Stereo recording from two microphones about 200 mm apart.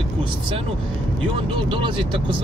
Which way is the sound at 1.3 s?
25° right (ahead or behind).